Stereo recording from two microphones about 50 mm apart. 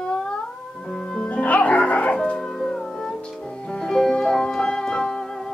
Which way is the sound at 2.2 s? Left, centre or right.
Centre.